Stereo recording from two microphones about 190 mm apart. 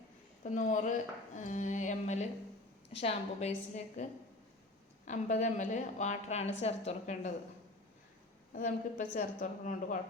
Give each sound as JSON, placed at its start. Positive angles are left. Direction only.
{"t": 0.5, "sound": "a woman's voice", "side_deg": 40}
{"t": 5.0, "sound": "a woman's voice", "side_deg": 40}
{"t": 8.5, "sound": "a woman's voice", "side_deg": 45}